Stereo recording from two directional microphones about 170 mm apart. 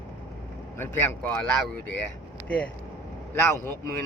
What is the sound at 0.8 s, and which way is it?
Speech, 10° left (ahead or behind).